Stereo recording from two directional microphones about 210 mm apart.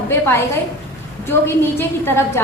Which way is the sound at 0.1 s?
10° left (ahead or behind).